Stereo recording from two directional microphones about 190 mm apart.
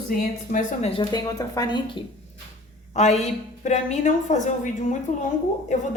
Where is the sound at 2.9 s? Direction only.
35° left (ahead or behind).